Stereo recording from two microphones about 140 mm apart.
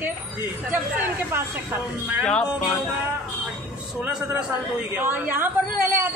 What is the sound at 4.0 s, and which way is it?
Speech, 5° right (ahead or behind).